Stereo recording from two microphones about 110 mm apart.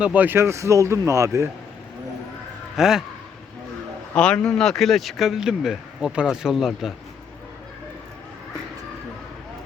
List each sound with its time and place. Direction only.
0.0 s speech: 15° right (ahead or behind)
2.7 s speech: 5° right (ahead or behind)
4.1 s speech: 10° left (ahead or behind)